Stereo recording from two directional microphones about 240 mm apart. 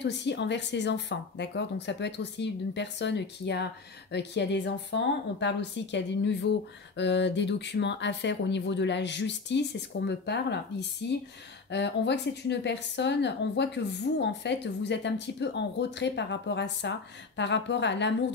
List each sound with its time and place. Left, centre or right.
0.0 s speech: left